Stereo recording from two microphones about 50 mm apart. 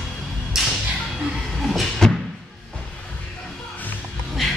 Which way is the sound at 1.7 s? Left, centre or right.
Centre.